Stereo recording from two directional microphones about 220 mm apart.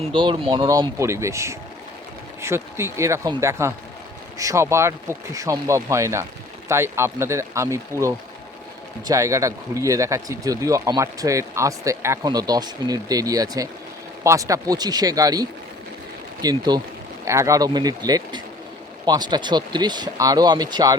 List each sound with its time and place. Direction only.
0.0 s speech: 20° right (ahead or behind)